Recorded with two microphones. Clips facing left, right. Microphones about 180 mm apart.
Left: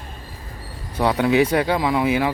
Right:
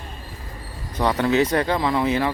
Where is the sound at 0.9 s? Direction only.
10° left (ahead or behind).